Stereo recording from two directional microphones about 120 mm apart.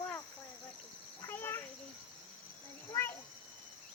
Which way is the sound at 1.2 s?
20° left (ahead or behind).